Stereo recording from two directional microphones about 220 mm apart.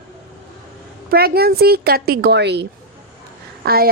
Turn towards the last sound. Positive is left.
turn(degrees=-45)  # may be behind; listen again after turning